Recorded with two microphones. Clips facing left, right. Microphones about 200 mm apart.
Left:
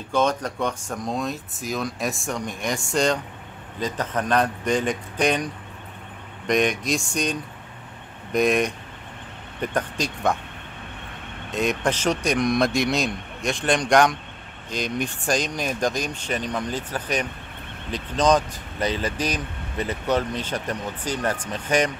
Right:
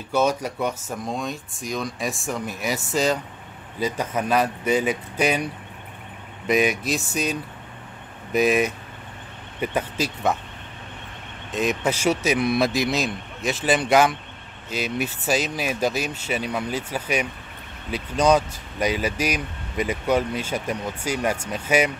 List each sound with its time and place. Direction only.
0.1 s speech: 10° right (ahead or behind)
11.5 s speech: centre (ahead or behind)